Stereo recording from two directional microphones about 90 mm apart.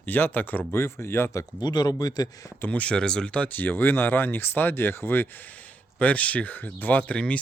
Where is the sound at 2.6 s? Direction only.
15° left (ahead or behind).